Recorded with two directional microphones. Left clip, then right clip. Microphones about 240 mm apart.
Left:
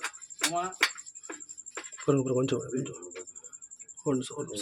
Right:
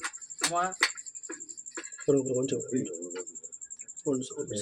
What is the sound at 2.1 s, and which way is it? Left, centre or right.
Speech, left.